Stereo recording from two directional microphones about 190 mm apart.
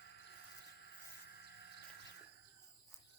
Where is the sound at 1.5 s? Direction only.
60° left (ahead or behind).